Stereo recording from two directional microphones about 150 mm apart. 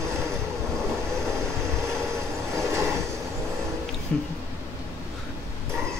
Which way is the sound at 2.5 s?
20° right (ahead or behind).